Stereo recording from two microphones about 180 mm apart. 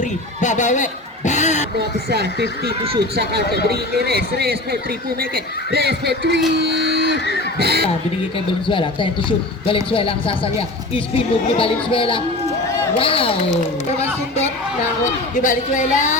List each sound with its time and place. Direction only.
0.0 s a sound: 40° left (ahead or behind)
1.8 s speech: 65° right (ahead or behind)
3.4 s speech: 65° left (ahead or behind)
3.7 s speech: 60° right (ahead or behind)
6.6 s a sound: 65° right (ahead or behind)
7.6 s speech: 60° right (ahead or behind)
8.6 s a man's voice: 30° left (ahead or behind); by 16.1 s 45° left (ahead or behind)